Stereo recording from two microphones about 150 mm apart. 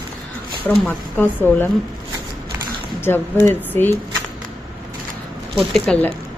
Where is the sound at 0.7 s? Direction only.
10° left (ahead or behind).